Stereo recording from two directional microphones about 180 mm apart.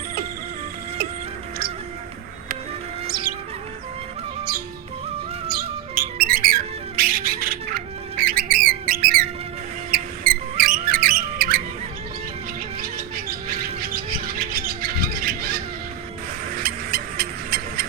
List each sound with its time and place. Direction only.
3.1 s music: 55° right (ahead or behind)
5.5 s music: 55° right (ahead or behind)
12.8 s bird: 55° right (ahead or behind)
16.6 s a sound: 55° right (ahead or behind)